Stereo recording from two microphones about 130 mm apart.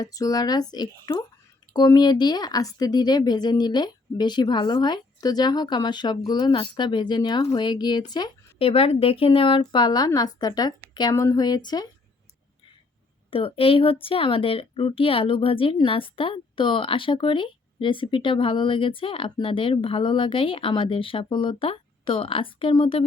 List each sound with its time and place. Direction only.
0.0 s speech: 30° left (ahead or behind)
8.5 s a woman's voice: 45° left (ahead or behind); by 11.9 s 30° left (ahead or behind)
13.3 s a woman's voice: 45° left (ahead or behind)